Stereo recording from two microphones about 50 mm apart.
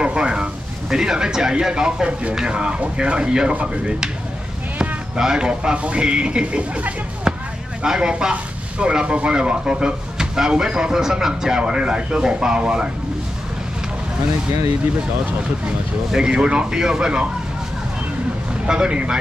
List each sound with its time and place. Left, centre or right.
0.0 s speech: centre
7.8 s speech: centre
16.1 s speech: centre
18.7 s speech: centre